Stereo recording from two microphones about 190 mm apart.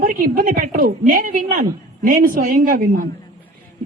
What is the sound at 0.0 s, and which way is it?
A woman's voice, 50° right (ahead or behind).